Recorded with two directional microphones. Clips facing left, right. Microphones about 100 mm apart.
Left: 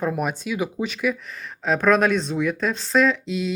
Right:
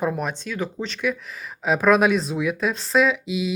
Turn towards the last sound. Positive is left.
turn(degrees=-5)  # may be behind; listen again after turning